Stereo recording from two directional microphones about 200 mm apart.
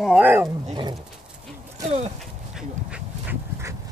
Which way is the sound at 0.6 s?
25° right (ahead or behind).